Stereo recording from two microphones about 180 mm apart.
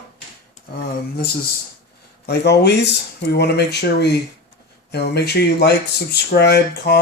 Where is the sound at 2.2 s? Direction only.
65° left (ahead or behind).